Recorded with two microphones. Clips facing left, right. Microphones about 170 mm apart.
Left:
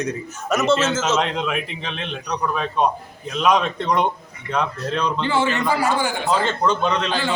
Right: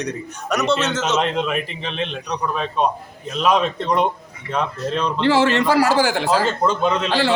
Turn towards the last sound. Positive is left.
turn(degrees=-5)  # may be behind; listen again after turning